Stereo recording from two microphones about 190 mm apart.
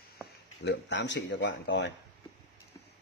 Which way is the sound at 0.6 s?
65° left (ahead or behind).